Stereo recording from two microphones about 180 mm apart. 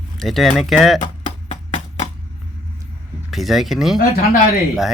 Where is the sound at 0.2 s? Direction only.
Centre (ahead or behind).